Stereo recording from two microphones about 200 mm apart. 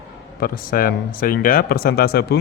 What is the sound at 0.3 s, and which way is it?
Speech, 45° left (ahead or behind).